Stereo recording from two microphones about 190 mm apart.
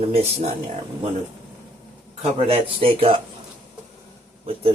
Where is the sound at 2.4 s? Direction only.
30° right (ahead or behind).